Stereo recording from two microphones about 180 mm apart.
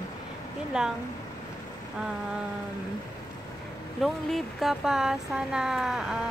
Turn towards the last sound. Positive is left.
turn(degrees=0)  # may be behind; listen again after turning